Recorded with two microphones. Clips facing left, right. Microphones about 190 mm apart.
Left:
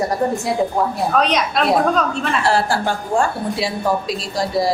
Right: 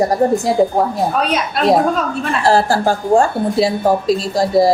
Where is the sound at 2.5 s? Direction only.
40° right (ahead or behind).